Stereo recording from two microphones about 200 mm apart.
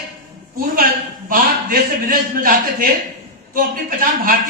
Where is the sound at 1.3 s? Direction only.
45° right (ahead or behind).